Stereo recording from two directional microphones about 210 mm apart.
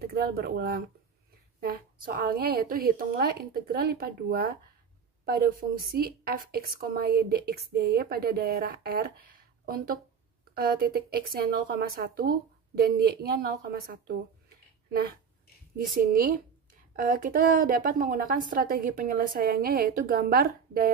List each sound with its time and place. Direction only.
0.0 s a woman's voice: 45° right (ahead or behind)
10.5 s a woman's voice: 45° right (ahead or behind)
15.8 s a woman's voice: 45° right (ahead or behind)